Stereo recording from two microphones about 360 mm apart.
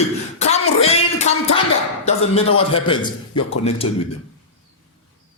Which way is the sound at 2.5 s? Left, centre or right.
Centre.